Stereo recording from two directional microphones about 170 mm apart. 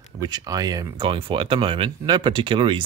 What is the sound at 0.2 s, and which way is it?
Speech, 25° right (ahead or behind).